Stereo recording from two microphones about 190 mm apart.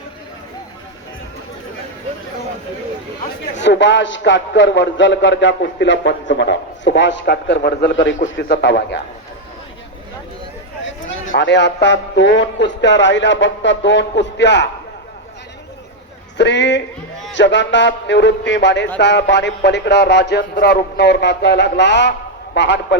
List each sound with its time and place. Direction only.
3.6 s a man's voice: 70° left (ahead or behind)
11.3 s a man's voice: 70° left (ahead or behind)
16.4 s a man's voice: 65° left (ahead or behind)